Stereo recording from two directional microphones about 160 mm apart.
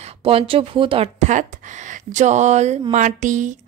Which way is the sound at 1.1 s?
50° right (ahead or behind).